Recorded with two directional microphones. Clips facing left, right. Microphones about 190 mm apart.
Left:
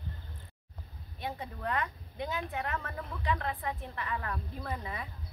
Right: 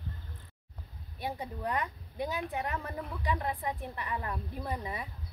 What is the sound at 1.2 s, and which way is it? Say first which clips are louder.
A woman's voice: right 2 dB; 15° right (ahead or behind).